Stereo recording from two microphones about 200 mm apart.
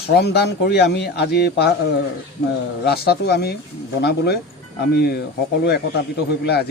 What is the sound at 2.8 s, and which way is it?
A man's voice, 50° left (ahead or behind).